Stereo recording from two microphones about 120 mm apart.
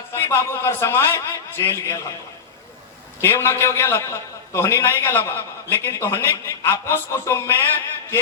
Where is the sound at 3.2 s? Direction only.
20° left (ahead or behind).